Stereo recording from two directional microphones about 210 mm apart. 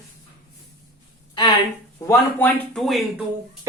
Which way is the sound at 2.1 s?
10° left (ahead or behind).